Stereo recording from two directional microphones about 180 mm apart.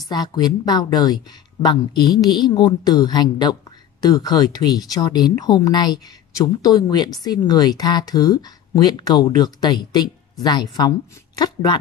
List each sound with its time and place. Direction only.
0.1 s speech: 20° left (ahead or behind)